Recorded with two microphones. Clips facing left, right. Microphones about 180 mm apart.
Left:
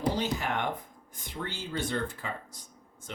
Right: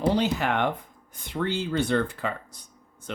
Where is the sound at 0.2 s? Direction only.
70° right (ahead or behind).